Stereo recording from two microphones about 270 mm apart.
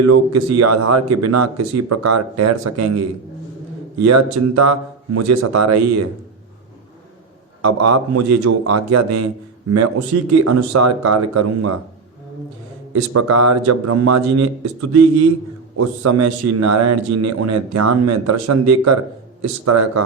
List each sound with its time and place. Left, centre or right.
0.0 s speech: right
7.6 s speech: right
10.3 s speech: right
12.9 s speech: right